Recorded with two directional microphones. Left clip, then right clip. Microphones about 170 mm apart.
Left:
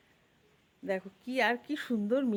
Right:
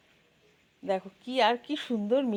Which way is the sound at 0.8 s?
5° left (ahead or behind).